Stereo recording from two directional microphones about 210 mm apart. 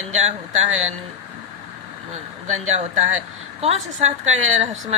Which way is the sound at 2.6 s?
35° right (ahead or behind).